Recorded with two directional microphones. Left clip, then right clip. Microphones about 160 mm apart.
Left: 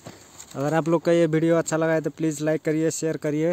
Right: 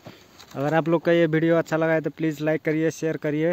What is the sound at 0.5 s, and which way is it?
Speech, 5° left (ahead or behind).